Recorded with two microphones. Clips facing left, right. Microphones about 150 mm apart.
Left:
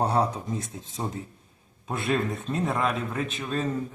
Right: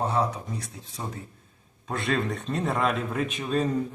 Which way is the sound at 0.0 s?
35° left (ahead or behind).